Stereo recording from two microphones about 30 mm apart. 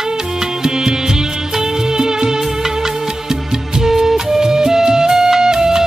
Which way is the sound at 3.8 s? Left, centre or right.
Centre.